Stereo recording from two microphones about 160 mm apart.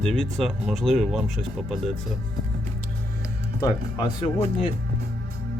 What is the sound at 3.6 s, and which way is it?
Speech, 25° left (ahead or behind).